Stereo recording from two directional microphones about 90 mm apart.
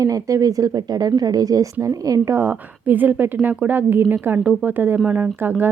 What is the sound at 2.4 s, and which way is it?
Speech, 20° right (ahead or behind).